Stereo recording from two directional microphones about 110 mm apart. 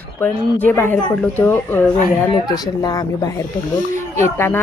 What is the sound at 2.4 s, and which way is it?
Speech, 35° left (ahead or behind).